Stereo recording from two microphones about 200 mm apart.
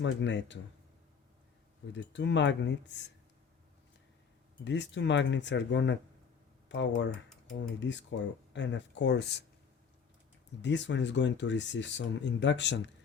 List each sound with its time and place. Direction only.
0.0 s speech: 60° left (ahead or behind)
1.9 s speech: 65° left (ahead or behind)
4.6 s speech: 65° left (ahead or behind)
10.6 s speech: 65° left (ahead or behind)